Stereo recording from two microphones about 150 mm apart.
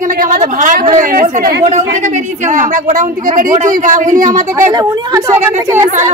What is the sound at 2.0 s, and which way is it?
Speech, 55° right (ahead or behind).